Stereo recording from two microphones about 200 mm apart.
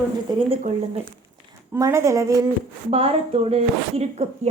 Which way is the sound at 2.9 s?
30° right (ahead or behind).